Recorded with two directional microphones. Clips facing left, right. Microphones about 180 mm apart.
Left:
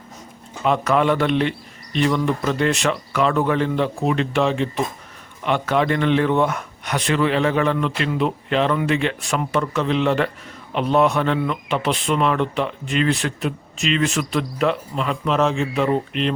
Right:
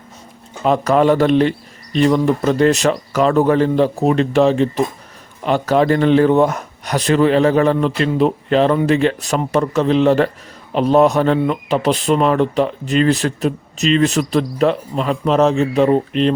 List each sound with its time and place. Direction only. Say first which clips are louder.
0.6 s speech: right 5 dB; 35° right (ahead or behind)